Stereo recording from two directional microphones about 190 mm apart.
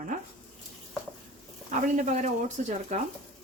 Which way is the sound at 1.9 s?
40° right (ahead or behind).